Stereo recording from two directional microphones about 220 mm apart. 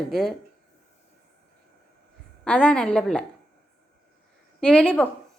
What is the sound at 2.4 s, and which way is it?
Speech, 5° left (ahead or behind).